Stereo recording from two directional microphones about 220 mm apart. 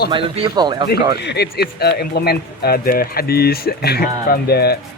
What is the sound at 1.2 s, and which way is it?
Speech, 50° left (ahead or behind).